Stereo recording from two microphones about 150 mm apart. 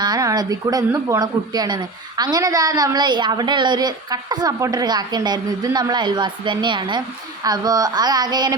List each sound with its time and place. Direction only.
0.0 s speech: 25° right (ahead or behind)